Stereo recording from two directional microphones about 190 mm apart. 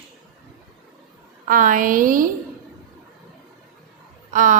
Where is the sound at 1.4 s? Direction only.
45° right (ahead or behind).